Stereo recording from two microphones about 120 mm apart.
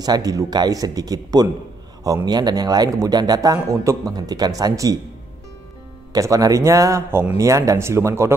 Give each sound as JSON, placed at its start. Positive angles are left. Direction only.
{"t": 0.0, "sound": "a man's voice", "side_deg": -30}
{"t": 6.1, "sound": "speech", "side_deg": -30}